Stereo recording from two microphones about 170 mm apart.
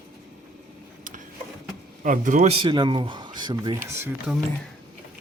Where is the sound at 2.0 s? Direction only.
50° right (ahead or behind); by 4.1 s 15° right (ahead or behind).